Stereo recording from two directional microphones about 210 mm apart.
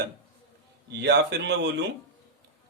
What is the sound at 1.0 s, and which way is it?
Speech, 55° right (ahead or behind).